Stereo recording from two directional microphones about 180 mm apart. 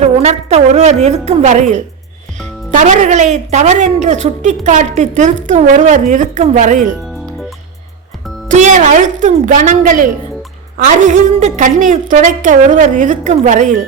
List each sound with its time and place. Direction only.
0.0 s brass instrument: 35° right (ahead or behind)
1.0 s a woman's voice: 35° right (ahead or behind)
8.4 s a woman's voice: 40° right (ahead or behind)